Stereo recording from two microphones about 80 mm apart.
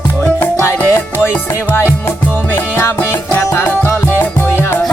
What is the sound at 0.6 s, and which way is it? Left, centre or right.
Music, left.